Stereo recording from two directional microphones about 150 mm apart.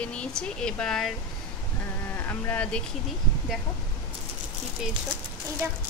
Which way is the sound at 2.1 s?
15° left (ahead or behind).